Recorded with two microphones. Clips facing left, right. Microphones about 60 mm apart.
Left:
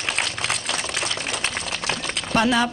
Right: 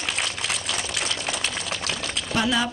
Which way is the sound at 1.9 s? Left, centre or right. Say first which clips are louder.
Left 3 dB; left.